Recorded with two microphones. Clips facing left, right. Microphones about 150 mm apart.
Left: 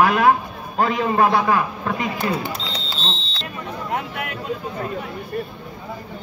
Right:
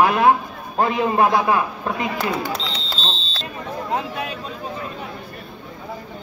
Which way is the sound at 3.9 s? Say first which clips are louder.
Right 2 dB; 25° right (ahead or behind).